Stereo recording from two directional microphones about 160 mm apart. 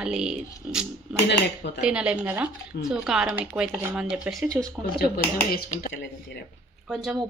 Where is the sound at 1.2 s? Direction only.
90° left.